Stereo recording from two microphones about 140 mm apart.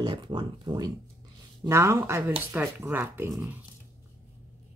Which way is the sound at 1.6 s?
20° right (ahead or behind).